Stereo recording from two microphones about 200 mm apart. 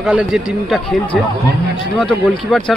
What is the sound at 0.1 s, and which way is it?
Speech, centre (ahead or behind).